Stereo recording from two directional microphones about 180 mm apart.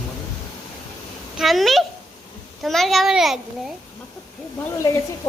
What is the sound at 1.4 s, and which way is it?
A child's voice, centre (ahead or behind).